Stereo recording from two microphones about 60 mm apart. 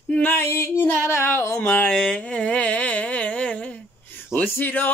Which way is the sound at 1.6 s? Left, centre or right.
Left.